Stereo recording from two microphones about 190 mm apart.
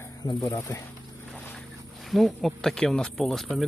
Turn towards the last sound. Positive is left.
turn(degrees=0)  # may be behind; listen again after turning